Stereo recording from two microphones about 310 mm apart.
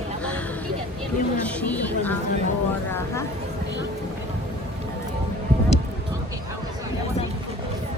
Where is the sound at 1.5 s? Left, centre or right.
Centre.